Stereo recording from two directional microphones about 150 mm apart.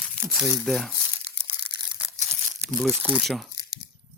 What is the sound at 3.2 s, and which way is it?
Speech, centre (ahead or behind).